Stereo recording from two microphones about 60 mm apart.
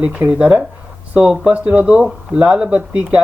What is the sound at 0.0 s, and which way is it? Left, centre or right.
Speech, right.